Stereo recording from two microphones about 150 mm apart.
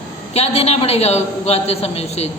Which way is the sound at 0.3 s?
45° left (ahead or behind).